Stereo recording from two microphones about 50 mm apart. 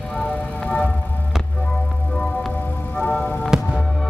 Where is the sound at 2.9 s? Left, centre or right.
Centre.